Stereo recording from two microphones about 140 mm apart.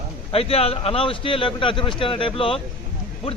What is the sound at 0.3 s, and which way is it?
Speech, 45° left (ahead or behind).